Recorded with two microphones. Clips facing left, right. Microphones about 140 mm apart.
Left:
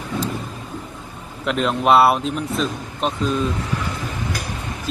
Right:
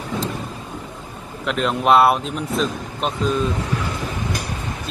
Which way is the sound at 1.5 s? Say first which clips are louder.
Even; centre (ahead or behind).